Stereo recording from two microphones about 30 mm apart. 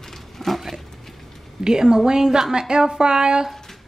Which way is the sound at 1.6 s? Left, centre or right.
Right.